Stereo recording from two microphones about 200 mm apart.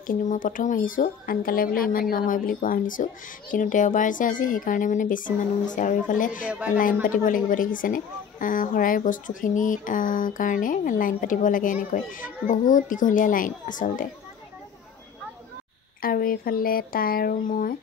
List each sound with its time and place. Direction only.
0.0 s a woman's voice: 45° left (ahead or behind)
6.5 s speech: 5° right (ahead or behind)
6.8 s a woman's voice: 45° left (ahead or behind)
16.0 s speech: 45° left (ahead or behind)